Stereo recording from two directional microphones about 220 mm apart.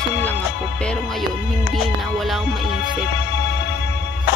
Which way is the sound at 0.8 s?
5° left (ahead or behind).